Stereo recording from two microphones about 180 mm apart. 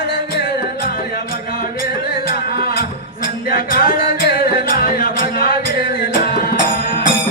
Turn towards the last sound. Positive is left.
turn(degrees=55)  # may be behind; listen again after turning